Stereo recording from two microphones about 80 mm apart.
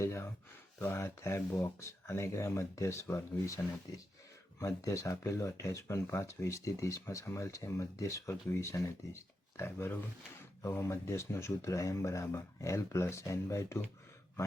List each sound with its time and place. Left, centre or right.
0.0 s speech: left